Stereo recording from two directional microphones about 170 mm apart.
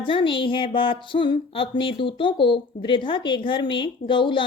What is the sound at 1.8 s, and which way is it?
A woman's voice, 30° left (ahead or behind).